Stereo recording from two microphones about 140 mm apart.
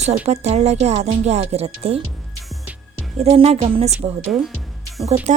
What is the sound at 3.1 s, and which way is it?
Speech, 45° right (ahead or behind).